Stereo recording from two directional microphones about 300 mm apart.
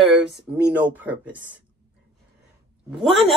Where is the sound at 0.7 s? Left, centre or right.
Centre.